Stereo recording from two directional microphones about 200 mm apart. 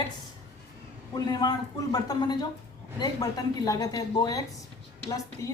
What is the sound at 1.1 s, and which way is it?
A man's voice, 20° left (ahead or behind).